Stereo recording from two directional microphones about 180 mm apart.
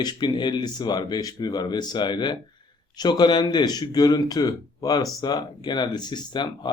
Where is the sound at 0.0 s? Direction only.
25° left (ahead or behind).